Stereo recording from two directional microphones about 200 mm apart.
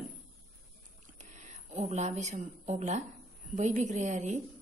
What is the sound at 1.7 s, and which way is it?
A woman's voice, 35° right (ahead or behind).